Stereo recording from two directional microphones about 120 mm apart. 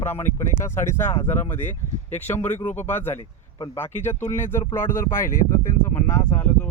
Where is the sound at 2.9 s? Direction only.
20° left (ahead or behind).